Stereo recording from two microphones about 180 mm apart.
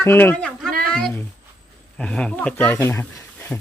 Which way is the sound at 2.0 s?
5° left (ahead or behind).